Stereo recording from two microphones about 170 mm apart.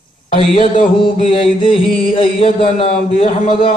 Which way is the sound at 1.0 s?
30° left (ahead or behind).